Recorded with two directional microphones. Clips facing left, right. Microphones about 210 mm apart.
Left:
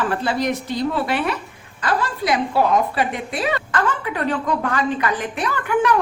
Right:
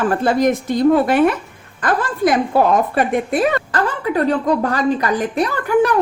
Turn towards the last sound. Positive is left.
turn(degrees=-35)  # may be behind; listen again after turning